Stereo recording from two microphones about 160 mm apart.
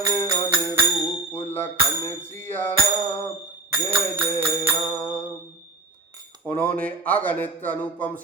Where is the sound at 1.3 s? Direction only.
15° left (ahead or behind).